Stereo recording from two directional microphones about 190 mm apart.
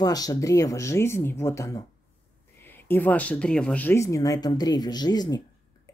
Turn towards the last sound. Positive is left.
turn(degrees=20)  # may be behind; listen again after turning